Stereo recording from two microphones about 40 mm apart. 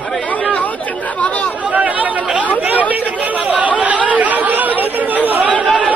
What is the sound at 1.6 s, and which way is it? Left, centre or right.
Chatter, right.